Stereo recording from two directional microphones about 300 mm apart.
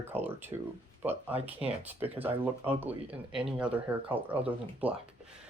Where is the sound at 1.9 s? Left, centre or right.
Centre.